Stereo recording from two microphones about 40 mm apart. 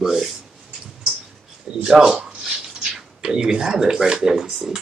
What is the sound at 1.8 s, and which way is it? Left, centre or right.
Speech, centre.